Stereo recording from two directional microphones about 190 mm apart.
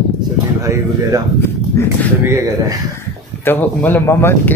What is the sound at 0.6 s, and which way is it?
Speech, 15° right (ahead or behind).